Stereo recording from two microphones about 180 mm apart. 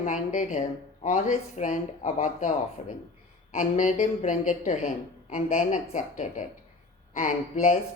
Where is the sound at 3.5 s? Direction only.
45° left (ahead or behind).